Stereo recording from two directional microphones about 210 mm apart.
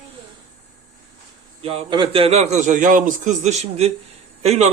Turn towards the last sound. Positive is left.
turn(degrees=-30)  # may be behind; listen again after turning